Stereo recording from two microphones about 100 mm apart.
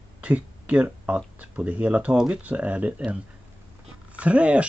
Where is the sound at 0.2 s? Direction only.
15° right (ahead or behind).